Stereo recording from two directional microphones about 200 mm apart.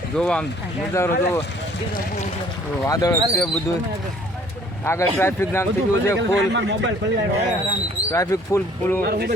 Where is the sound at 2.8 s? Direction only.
15° left (ahead or behind).